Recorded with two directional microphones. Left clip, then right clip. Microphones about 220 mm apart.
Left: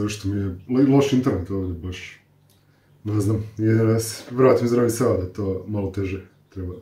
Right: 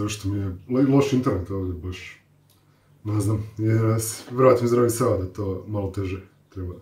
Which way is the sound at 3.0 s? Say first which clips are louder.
Left 3 dB; centre (ahead or behind).